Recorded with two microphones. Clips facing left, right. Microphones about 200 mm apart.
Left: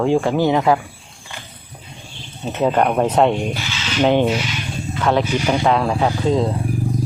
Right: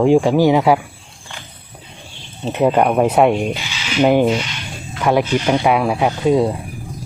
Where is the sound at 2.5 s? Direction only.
10° right (ahead or behind).